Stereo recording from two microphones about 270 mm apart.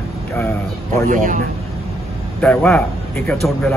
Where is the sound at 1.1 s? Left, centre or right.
Right.